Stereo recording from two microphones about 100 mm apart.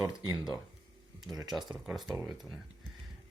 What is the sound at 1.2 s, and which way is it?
Speech, 40° right (ahead or behind).